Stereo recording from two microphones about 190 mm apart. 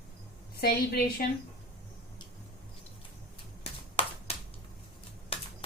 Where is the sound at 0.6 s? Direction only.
55° left (ahead or behind).